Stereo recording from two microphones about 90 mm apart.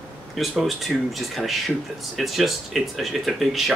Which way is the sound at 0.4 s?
Centre (ahead or behind).